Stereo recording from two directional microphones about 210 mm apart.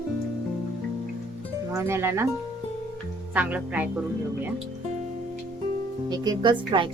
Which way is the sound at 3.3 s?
5° right (ahead or behind).